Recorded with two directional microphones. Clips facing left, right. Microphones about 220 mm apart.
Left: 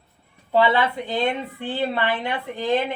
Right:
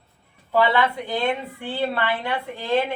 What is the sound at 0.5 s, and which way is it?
A woman's voice, 20° left (ahead or behind).